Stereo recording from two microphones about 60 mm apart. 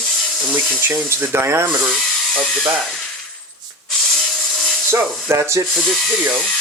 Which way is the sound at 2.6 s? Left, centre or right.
Centre.